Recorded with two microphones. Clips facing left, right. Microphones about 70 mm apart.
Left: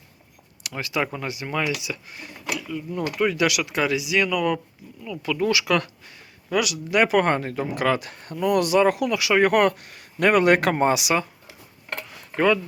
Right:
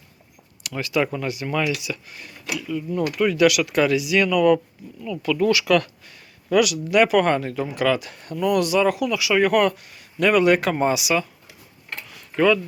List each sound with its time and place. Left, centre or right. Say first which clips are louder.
0.8 s speech: right 4 dB; left
1.0 s speech: right 3 dB; centre
2.6 s speech: right 7 dB; centre; by 11.1 s left